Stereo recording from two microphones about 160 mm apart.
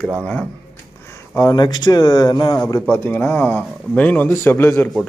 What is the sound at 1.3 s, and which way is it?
Speech, 25° left (ahead or behind).